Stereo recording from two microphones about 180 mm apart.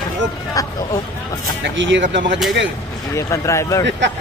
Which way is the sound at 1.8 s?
90° right.